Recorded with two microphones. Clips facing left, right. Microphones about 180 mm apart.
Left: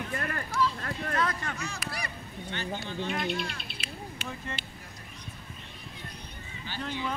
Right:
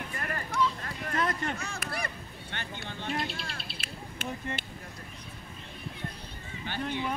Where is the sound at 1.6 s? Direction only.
55° right (ahead or behind).